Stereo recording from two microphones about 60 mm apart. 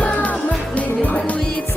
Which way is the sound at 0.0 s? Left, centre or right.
Left.